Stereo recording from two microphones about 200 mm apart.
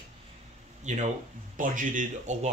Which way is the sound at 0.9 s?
35° right (ahead or behind).